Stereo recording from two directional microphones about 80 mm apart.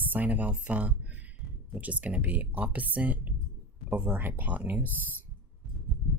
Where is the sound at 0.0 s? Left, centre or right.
Right.